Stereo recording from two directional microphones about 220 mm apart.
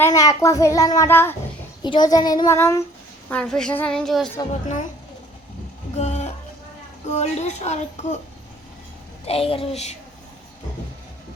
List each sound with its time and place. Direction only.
0.0 s a child's voice: 15° left (ahead or behind)
5.9 s music: 30° left (ahead or behind)
7.1 s speech: 30° left (ahead or behind)
9.2 s a child's voice: 25° left (ahead or behind)